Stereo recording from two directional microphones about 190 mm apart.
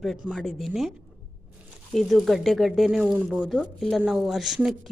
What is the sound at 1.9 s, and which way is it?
Speech, centre (ahead or behind).